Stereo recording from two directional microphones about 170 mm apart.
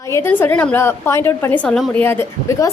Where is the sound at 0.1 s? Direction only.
15° left (ahead or behind).